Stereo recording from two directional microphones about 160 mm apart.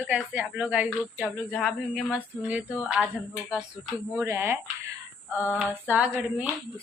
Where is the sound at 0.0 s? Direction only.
5° right (ahead or behind).